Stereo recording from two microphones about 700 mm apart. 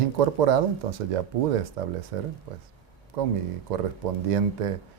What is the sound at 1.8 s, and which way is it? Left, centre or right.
Speech, right.